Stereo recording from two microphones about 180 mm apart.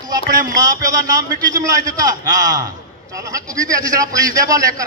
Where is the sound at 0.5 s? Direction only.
20° right (ahead or behind).